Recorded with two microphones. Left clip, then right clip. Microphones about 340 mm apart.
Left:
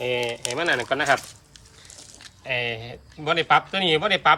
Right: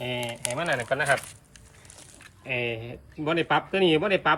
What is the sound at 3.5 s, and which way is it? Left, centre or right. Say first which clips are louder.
Speech: left 1 dB; left.